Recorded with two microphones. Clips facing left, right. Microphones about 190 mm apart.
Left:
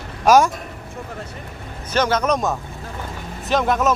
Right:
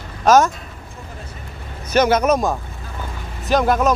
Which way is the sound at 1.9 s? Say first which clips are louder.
Right 4 dB; 10° right (ahead or behind).